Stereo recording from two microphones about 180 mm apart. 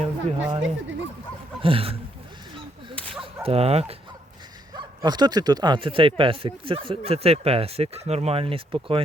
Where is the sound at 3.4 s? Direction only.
35° right (ahead or behind).